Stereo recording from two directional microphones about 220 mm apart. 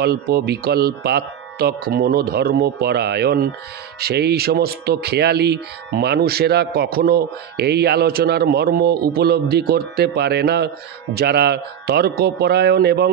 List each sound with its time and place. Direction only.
0.0 s speech: 45° right (ahead or behind)